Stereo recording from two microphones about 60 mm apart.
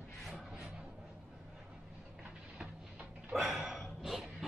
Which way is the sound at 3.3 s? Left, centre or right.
Centre.